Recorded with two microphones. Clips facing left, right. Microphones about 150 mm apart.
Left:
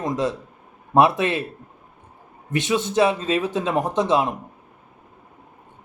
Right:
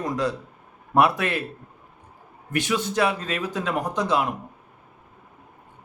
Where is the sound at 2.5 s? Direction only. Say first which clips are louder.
Left 3 dB; 20° left (ahead or behind).